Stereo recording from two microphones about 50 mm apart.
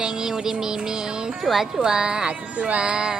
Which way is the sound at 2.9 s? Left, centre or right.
Centre.